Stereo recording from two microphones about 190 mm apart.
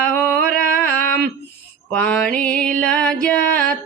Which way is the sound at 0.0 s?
5° left (ahead or behind).